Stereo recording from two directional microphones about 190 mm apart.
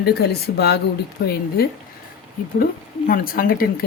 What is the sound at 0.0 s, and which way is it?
Speech, 55° left (ahead or behind).